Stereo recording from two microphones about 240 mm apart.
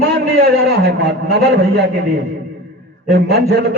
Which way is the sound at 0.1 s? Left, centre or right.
Right.